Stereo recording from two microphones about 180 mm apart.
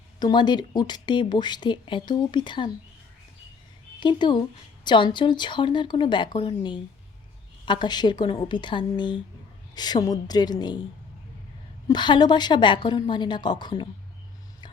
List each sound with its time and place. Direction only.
0.2 s speech: 25° left (ahead or behind)
4.0 s speech: 25° left (ahead or behind)
11.9 s speech: 25° left (ahead or behind)